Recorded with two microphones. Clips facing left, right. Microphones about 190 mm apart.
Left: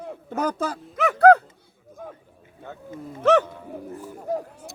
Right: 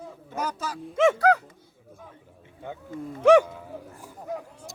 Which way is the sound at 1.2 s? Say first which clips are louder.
Left 8 dB; 60° left (ahead or behind).